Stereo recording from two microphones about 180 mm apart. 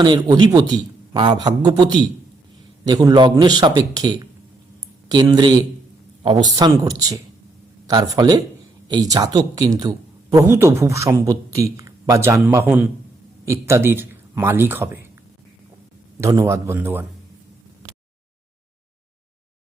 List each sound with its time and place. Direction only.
0.0 s a man's voice: 25° right (ahead or behind)
16.2 s a man's voice: 20° right (ahead or behind)